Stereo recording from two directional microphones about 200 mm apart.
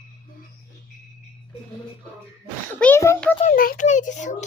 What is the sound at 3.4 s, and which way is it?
Speech, 45° left (ahead or behind).